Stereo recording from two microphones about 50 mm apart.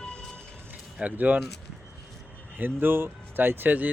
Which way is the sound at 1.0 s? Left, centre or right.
Right.